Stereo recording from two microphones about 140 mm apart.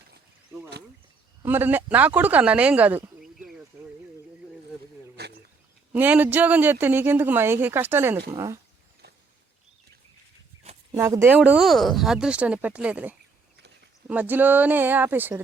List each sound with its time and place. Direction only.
1.5 s speech: 15° right (ahead or behind)
5.9 s speech: 10° right (ahead or behind)
10.9 s speech: 20° right (ahead or behind)